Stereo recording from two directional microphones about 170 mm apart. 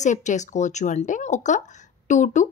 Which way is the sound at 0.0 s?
45° left (ahead or behind).